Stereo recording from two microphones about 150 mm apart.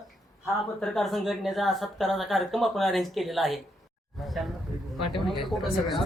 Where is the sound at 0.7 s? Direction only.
Centre (ahead or behind).